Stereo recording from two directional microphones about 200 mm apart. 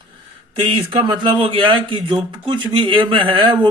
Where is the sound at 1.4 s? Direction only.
25° right (ahead or behind).